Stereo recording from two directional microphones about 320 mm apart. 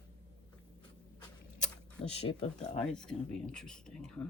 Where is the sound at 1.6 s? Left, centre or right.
Centre.